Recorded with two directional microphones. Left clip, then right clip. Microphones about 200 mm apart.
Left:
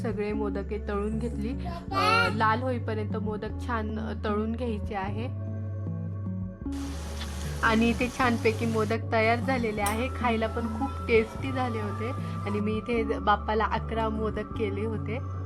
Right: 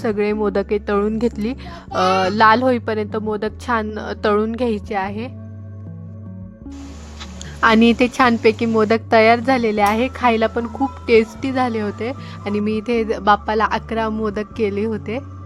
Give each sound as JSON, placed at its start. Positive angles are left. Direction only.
{"t": 0.0, "sound": "a woman's voice", "side_deg": -40}
{"t": 7.6, "sound": "a woman's voice", "side_deg": -40}